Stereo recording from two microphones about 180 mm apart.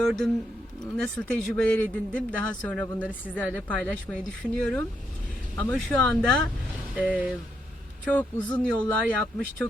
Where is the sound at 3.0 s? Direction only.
10° right (ahead or behind).